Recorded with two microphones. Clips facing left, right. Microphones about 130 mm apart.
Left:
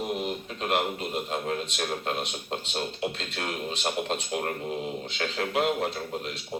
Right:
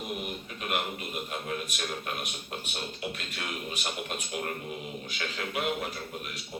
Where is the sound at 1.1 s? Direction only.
65° left (ahead or behind).